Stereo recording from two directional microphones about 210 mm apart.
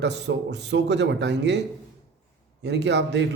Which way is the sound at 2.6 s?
55° right (ahead or behind).